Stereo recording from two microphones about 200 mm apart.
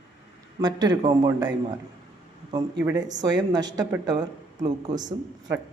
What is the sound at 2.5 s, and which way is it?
Speech, 20° right (ahead or behind).